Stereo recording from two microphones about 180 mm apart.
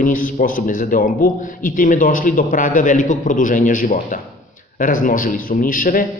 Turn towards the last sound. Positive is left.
turn(degrees=50)  # may be behind; listen again after turning